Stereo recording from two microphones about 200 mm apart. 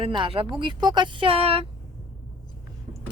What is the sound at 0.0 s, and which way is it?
Speech, 25° right (ahead or behind).